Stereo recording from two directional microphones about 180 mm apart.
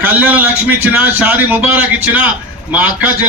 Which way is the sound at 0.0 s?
10° right (ahead or behind).